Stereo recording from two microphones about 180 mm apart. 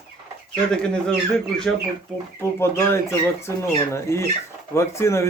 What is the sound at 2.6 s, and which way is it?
Speech, 15° left (ahead or behind).